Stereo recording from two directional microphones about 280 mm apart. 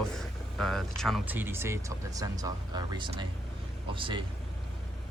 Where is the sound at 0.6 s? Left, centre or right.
Centre.